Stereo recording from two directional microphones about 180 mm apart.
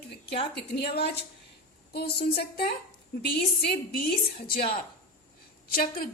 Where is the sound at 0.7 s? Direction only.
65° left (ahead or behind).